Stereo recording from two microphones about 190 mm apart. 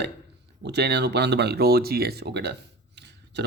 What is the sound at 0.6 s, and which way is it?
Speech, 65° right (ahead or behind).